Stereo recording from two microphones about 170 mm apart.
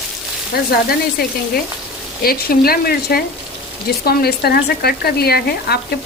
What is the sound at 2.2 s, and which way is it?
Speech, 60° left (ahead or behind).